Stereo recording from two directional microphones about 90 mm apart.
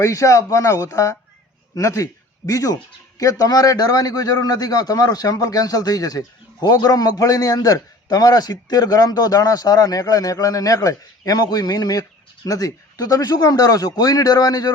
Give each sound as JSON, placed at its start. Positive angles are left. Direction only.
{"t": 0.0, "sound": "a man's voice", "side_deg": 35}